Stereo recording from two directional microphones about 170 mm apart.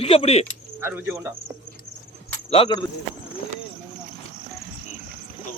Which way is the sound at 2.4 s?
35° left (ahead or behind).